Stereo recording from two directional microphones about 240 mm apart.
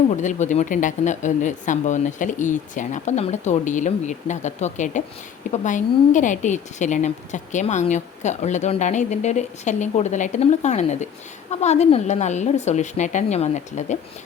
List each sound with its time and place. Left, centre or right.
0.1 s speech: left